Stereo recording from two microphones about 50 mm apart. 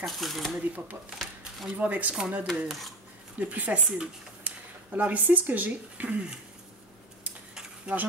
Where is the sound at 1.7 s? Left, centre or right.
Right.